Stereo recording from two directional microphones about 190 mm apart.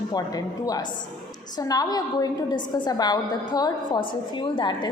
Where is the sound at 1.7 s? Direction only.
20° left (ahead or behind).